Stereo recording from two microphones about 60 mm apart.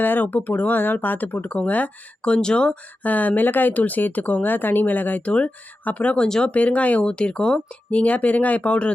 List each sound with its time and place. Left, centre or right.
0.0 s speech: left
6.2 s speech: centre
6.5 s speech: left